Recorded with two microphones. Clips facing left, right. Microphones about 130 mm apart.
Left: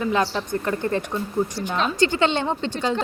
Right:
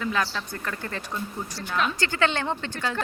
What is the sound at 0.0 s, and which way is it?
Speech, 25° left (ahead or behind).